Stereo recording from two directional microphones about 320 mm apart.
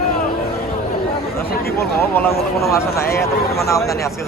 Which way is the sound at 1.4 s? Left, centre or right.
Left.